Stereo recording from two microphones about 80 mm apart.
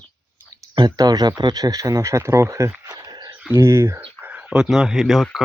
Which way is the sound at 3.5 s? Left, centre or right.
Right.